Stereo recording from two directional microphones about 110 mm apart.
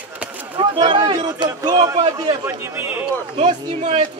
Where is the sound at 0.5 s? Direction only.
45° right (ahead or behind).